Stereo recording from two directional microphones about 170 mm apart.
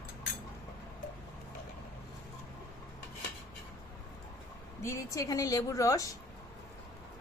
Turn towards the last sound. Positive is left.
turn(degrees=20)  # may be behind; listen again after turning